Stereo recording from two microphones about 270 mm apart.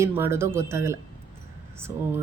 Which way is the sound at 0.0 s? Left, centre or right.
Centre.